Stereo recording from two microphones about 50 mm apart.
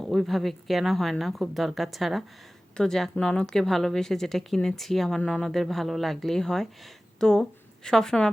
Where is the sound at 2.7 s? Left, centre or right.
Centre.